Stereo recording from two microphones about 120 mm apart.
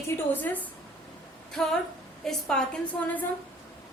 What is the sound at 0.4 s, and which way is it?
Speech, 15° left (ahead or behind).